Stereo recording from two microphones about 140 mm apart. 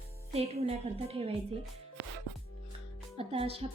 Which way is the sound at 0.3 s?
45° right (ahead or behind).